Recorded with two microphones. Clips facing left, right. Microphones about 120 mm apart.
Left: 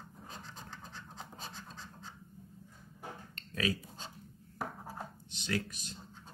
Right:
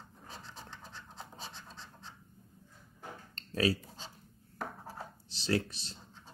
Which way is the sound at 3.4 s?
35° right (ahead or behind).